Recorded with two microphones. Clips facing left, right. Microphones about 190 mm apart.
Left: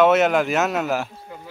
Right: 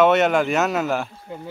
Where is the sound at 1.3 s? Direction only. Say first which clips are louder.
Right 5 dB; 25° right (ahead or behind).